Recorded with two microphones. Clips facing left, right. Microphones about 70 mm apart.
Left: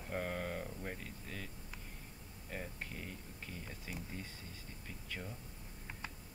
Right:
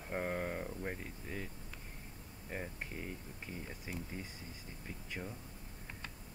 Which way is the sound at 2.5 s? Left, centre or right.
Centre.